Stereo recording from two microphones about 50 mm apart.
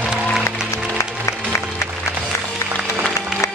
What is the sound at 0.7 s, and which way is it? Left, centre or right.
Music, left.